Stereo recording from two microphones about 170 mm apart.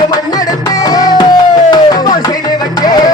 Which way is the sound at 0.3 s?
20° left (ahead or behind).